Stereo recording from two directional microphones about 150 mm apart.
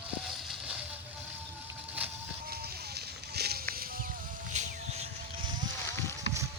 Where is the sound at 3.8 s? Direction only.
75° right (ahead or behind).